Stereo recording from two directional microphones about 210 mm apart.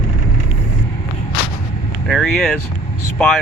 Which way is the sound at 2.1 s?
Centre (ahead or behind).